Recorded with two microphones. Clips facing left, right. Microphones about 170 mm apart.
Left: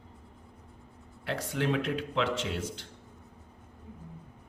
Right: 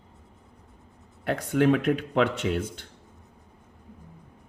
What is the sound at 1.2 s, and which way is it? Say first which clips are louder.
A man's voice: right 9 dB; 50° right (ahead or behind).